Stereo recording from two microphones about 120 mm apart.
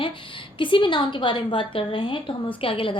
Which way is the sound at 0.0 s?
45° left (ahead or behind).